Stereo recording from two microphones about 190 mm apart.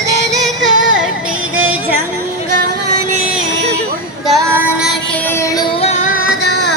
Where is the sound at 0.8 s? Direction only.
90° right.